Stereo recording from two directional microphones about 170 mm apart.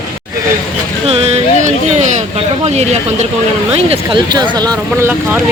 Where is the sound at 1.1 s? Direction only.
35° right (ahead or behind).